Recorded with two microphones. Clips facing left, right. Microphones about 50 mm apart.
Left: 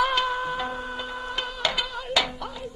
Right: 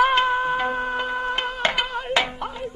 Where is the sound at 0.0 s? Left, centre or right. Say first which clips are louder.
Right 5 dB; right.